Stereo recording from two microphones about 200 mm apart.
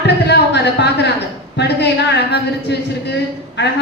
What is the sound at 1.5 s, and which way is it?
A woman's voice, 60° left (ahead or behind).